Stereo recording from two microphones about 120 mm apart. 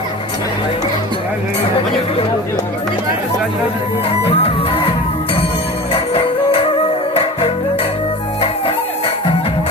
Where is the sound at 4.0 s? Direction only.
55° left (ahead or behind).